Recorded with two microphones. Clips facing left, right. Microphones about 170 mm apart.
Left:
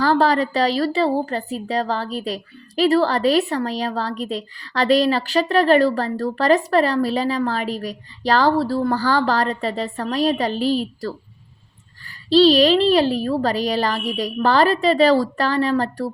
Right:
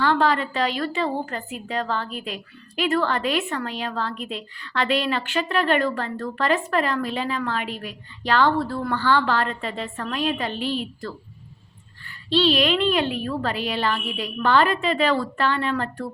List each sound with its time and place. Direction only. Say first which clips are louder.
0.0 s a woman's voice: left 4 dB; 35° left (ahead or behind)